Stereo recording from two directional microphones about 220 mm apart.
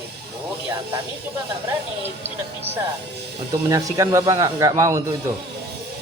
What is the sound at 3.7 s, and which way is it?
A woman's voice, 15° right (ahead or behind).